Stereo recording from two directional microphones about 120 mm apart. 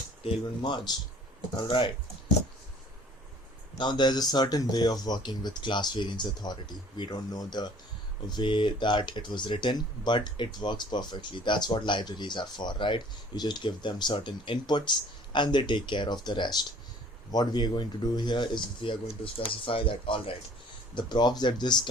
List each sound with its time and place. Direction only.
0.3 s speech: 40° left (ahead or behind)
3.8 s speech: 40° left (ahead or behind)